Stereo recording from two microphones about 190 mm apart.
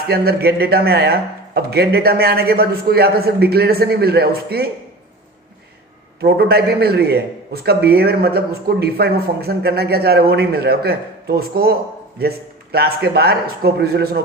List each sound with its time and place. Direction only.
0.0 s a man's voice: 55° right (ahead or behind)
6.2 s a man's voice: 55° right (ahead or behind)